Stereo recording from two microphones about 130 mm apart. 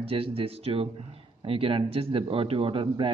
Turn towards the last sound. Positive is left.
turn(degrees=-40)  # may be behind; listen again after turning